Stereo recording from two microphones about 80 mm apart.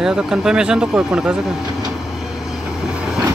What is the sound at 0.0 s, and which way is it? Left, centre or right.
Speech, centre.